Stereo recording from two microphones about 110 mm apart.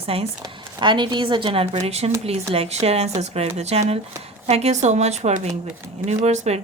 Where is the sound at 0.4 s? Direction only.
45° right (ahead or behind).